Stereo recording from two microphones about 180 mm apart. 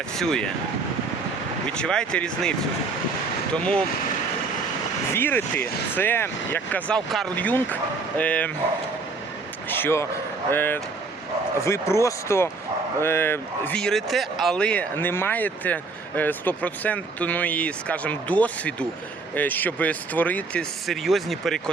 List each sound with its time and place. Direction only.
0.2 s speech: 5° left (ahead or behind)
1.7 s speech: 5° left (ahead or behind)
3.6 s speech: 5° left (ahead or behind)
5.1 s speech: 10° left (ahead or behind)
9.6 s speech: 10° left (ahead or behind)